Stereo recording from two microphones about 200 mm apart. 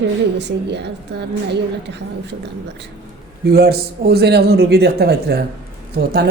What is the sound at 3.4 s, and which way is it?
A man's voice, 50° right (ahead or behind).